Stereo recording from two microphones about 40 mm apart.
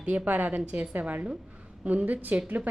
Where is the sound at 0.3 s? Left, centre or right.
Right.